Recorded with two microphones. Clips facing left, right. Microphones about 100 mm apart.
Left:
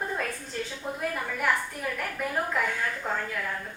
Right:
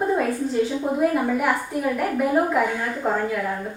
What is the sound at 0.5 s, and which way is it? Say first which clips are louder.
Speech: right 12 dB; 15° right (ahead or behind).